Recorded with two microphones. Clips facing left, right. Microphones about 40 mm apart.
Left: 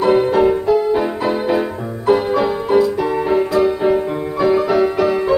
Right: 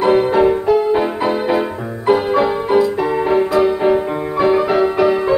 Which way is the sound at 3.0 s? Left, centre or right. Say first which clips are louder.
Right 1 dB; right.